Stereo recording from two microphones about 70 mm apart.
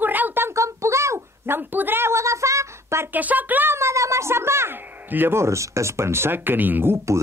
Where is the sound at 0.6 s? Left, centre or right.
Right.